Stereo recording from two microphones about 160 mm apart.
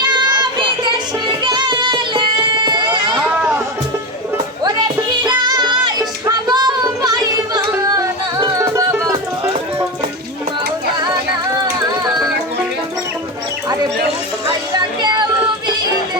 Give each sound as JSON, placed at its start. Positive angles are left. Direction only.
{"t": 0.0, "sound": "a sound", "side_deg": -25}
{"t": 1.5, "sound": "music", "side_deg": -30}
{"t": 5.2, "sound": "music", "side_deg": -25}
{"t": 14.7, "sound": "music", "side_deg": -25}